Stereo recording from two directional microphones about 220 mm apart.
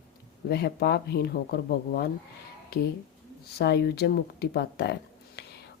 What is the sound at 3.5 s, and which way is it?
Speech, 45° left (ahead or behind).